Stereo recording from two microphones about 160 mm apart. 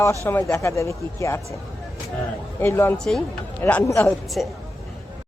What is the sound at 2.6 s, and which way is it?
Speech, 15° left (ahead or behind).